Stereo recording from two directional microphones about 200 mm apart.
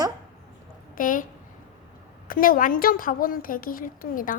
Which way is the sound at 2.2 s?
45° left (ahead or behind).